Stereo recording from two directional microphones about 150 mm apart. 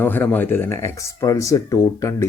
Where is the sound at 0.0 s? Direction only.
15° left (ahead or behind).